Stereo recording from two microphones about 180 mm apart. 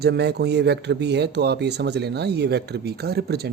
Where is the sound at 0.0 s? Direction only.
65° right (ahead or behind).